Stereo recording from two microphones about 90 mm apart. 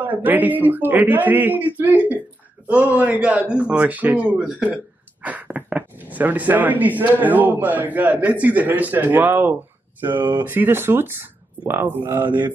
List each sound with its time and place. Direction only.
0.0 s speech: 20° right (ahead or behind)